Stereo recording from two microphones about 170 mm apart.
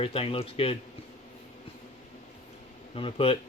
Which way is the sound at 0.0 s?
35° left (ahead or behind).